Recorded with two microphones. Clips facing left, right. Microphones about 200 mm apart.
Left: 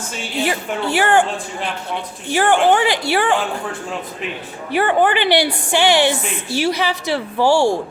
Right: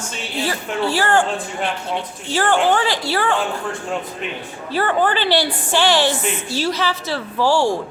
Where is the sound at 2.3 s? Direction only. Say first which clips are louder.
Left 3 dB; 15° left (ahead or behind).